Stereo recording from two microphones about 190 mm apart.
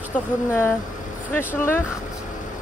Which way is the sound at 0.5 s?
10° left (ahead or behind).